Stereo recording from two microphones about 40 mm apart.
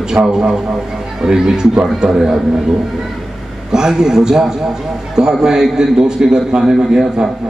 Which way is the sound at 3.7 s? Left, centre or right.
Centre.